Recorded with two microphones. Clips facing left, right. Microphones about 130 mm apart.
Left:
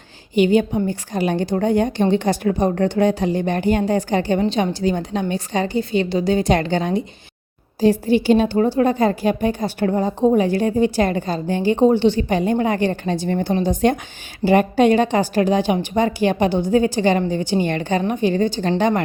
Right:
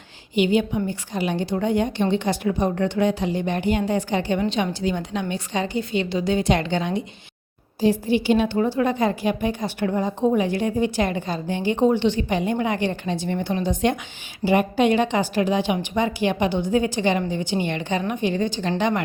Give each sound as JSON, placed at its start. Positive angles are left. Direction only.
{"t": 0.3, "sound": "a woman's voice", "side_deg": 40}